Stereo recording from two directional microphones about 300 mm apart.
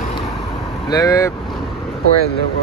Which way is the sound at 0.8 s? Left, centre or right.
Centre.